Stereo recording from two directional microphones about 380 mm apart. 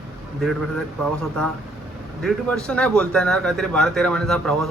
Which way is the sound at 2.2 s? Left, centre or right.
Centre.